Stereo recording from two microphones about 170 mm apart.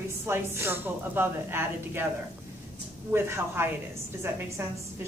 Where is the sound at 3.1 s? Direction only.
15° right (ahead or behind).